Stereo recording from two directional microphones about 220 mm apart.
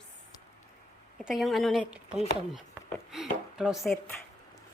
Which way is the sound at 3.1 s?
Centre (ahead or behind).